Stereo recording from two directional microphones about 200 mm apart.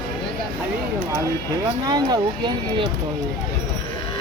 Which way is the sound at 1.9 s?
20° right (ahead or behind).